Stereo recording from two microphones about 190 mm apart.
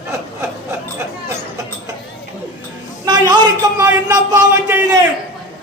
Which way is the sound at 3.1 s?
20° right (ahead or behind).